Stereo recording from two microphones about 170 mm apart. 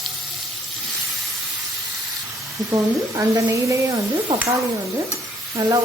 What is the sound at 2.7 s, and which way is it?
A woman's voice, 20° right (ahead or behind).